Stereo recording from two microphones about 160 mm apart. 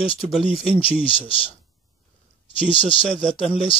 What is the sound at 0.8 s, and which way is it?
Speech, 35° left (ahead or behind).